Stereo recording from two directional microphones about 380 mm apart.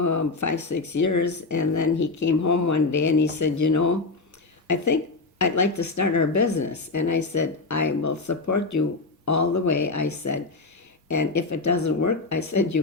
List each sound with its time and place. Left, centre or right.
0.0 s speech: left